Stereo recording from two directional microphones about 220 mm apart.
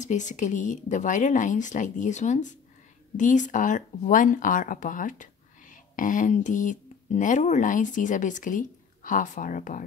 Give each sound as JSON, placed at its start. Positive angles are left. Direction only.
{"t": 0.0, "sound": "speech", "side_deg": 35}